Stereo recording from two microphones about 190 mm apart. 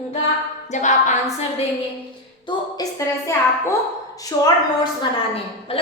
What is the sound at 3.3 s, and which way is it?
Speech, 15° left (ahead or behind).